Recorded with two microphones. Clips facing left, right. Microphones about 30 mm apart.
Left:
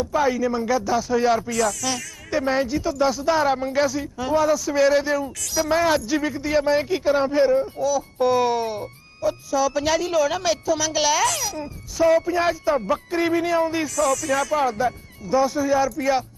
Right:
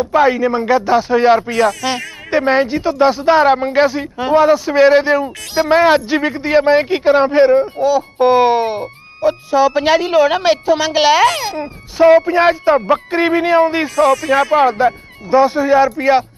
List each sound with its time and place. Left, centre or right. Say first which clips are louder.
0.0 s speech: right 8 dB; right